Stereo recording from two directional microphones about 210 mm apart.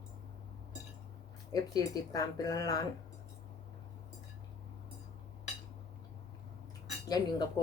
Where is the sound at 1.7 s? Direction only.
15° left (ahead or behind).